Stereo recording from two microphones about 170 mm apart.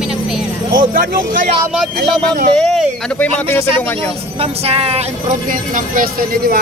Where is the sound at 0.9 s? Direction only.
60° right (ahead or behind).